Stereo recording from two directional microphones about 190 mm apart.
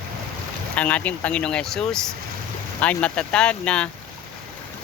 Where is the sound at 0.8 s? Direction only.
5° left (ahead or behind).